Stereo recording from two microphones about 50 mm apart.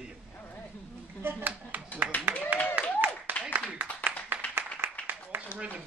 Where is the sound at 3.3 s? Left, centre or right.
Left.